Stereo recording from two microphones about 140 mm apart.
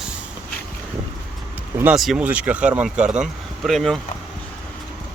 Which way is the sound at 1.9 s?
Centre (ahead or behind).